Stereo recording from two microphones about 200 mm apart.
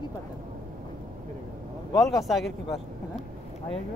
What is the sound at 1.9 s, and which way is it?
Speech, centre (ahead or behind).